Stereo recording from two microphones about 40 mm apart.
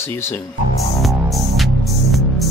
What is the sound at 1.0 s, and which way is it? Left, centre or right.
Music, centre.